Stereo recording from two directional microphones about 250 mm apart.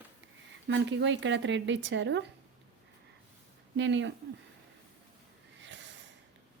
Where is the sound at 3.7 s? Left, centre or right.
Right.